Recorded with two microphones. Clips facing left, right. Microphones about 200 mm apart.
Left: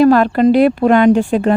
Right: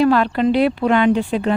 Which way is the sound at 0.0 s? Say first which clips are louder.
Left 5 dB; 45° left (ahead or behind).